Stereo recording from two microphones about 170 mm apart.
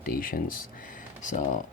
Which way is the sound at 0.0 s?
55° left (ahead or behind).